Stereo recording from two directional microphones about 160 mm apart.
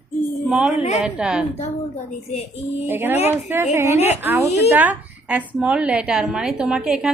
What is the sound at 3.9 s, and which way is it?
Speech, 45° left (ahead or behind).